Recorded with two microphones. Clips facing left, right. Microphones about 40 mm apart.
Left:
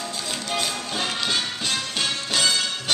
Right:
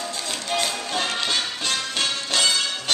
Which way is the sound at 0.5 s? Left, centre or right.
Centre.